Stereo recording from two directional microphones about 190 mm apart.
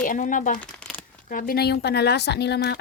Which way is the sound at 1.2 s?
45° left (ahead or behind).